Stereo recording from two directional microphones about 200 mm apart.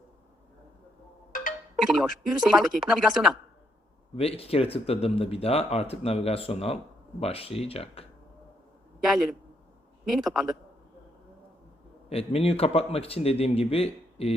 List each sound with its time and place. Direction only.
1.3 s music: 40° left (ahead or behind)
1.7 s speech: centre (ahead or behind)
4.1 s speech: 30° left (ahead or behind)
9.0 s speech: centre (ahead or behind)
12.0 s speech: 30° left (ahead or behind)